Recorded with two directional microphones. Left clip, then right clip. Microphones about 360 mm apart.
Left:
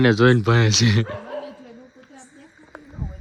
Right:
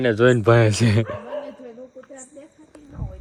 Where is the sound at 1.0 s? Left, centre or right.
Left.